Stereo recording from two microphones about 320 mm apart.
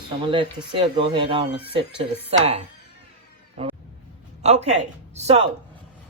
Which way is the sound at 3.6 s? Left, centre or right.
Centre.